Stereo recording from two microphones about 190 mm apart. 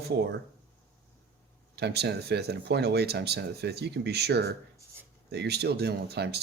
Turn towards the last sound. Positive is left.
turn(degrees=-60)  # may be behind; listen again after turning